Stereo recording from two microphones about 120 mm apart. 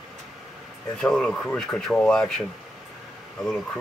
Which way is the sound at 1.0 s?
5° left (ahead or behind).